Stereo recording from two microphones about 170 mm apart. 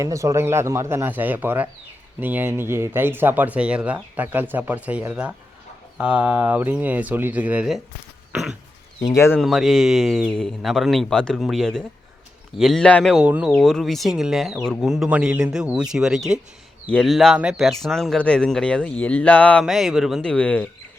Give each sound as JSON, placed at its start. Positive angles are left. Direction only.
{"t": 0.0, "sound": "speech", "side_deg": -20}
{"t": 8.3, "sound": "a sound", "side_deg": -5}
{"t": 9.0, "sound": "speech", "side_deg": 15}
{"t": 9.4, "sound": "speech", "side_deg": 0}
{"t": 13.2, "sound": "speech", "side_deg": -10}
{"t": 13.5, "sound": "speech", "side_deg": 0}